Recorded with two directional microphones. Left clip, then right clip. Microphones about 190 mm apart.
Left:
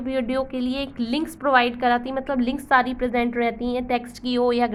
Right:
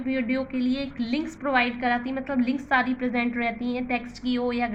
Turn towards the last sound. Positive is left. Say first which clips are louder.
# left 6 dB
turn(degrees=55)  # may be behind; listen again after turning